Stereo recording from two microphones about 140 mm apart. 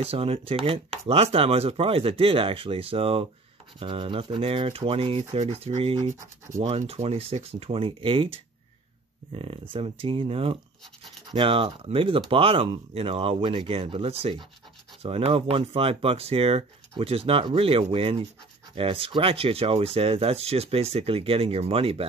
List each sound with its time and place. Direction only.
0.0 s speech: 45° right (ahead or behind)